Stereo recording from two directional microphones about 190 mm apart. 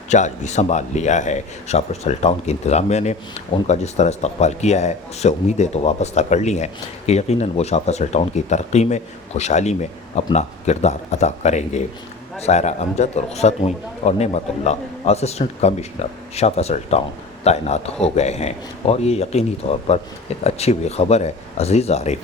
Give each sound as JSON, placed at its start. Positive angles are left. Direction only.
{"t": 0.1, "sound": "a man's voice", "side_deg": 40}